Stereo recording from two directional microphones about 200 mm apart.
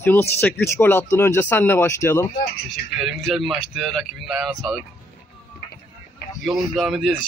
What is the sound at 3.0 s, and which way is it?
Speech, centre (ahead or behind).